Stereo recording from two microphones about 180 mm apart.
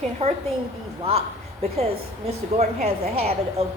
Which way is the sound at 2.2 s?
35° right (ahead or behind).